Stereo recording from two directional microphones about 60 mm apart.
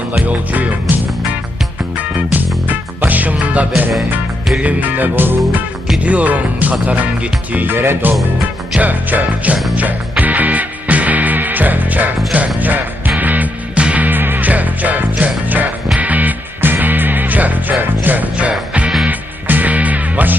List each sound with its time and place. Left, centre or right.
0.1 s speech: right
2.3 s music: right
3.3 s speech: right
4.6 s music: right
6.0 s speech: right
7.7 s music: right
8.8 s speech: right
9.7 s music: right